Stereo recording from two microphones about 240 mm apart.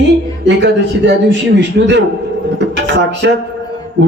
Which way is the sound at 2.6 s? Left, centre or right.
Right.